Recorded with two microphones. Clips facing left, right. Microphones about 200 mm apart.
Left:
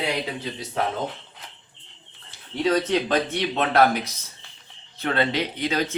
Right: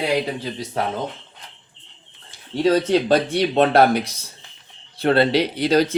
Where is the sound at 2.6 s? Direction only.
35° right (ahead or behind).